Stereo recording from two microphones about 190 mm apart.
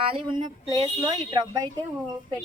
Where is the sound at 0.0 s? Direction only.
25° right (ahead or behind).